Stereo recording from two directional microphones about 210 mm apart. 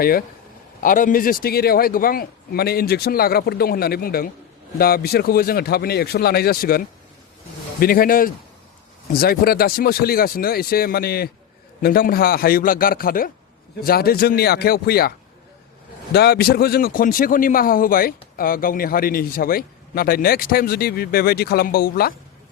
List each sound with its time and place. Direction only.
0.0 s a man's voice: 45° left (ahead or behind)
16.1 s a man's voice: 50° left (ahead or behind)